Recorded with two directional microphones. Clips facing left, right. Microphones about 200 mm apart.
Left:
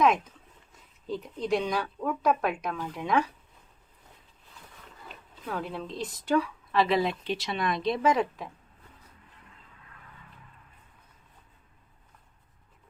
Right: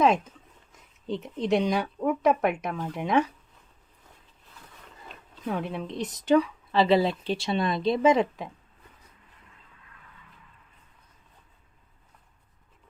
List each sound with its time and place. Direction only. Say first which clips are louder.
0.7 s speech: right 2 dB; 25° right (ahead or behind)
5.5 s speech: right 3 dB; 20° right (ahead or behind)